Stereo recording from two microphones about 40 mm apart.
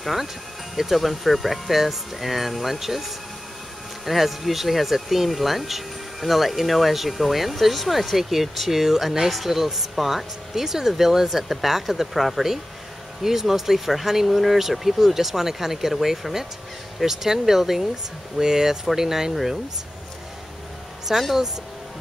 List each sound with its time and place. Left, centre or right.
0.0 s speech: centre
21.1 s speech: centre